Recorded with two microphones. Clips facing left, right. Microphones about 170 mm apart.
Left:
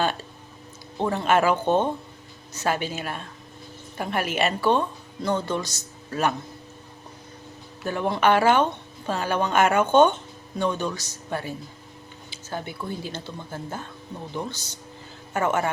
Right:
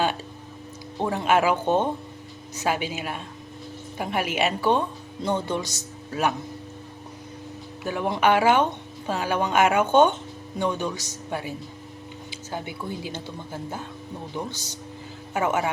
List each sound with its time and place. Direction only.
0.9 s speech: 10° right (ahead or behind)
7.9 s speech: 10° right (ahead or behind)